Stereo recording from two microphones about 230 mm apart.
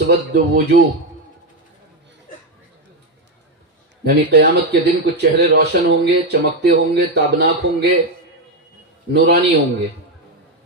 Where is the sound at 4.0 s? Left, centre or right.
Right.